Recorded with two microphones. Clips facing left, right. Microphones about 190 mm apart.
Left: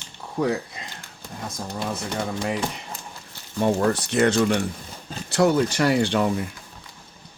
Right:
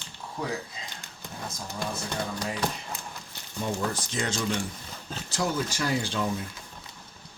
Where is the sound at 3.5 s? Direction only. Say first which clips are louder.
Left 9 dB; 70° left (ahead or behind).